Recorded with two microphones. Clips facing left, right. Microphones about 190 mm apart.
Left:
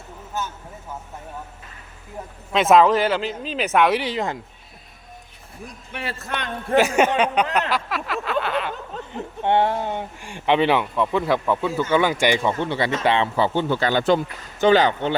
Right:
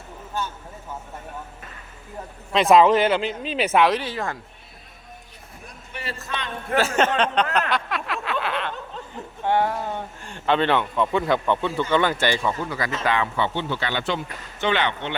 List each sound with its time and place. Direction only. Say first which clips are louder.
2.5 s a man's voice: even; centre (ahead or behind)
3.2 s speech: even; 40° left (ahead or behind)
3.7 s a man's voice: left 1 dB; centre (ahead or behind)
3.9 s speech: left 3 dB; 15° left (ahead or behind)
5.9 s a man's voice: left 2 dB; 60° left (ahead or behind)
6.7 s speech: left 3 dB; 15° left (ahead or behind)
7.7 s a sound: left 1 dB; centre (ahead or behind)
9.4 s speech: left 2 dB; 25° left (ahead or behind)
12.5 s speech: left 5 dB; 30° left (ahead or behind)